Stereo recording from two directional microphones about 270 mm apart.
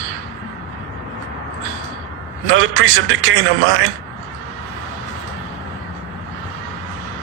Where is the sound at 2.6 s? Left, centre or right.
Right.